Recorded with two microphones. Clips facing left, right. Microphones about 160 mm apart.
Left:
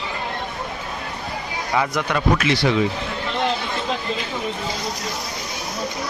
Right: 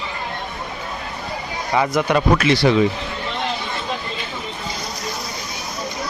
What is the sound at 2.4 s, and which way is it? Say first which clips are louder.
Speech: right 4 dB; 40° right (ahead or behind).